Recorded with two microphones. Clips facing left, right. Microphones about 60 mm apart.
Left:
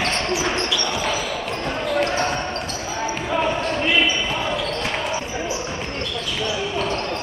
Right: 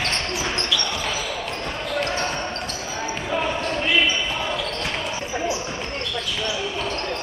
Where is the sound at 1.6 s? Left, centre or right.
Centre.